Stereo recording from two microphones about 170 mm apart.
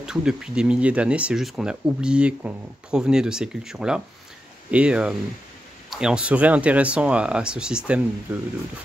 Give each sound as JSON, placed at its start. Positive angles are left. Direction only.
{"t": 0.0, "sound": "speech", "side_deg": -5}